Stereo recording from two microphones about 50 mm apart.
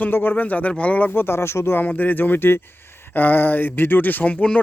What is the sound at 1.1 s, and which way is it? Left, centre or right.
Speech, left.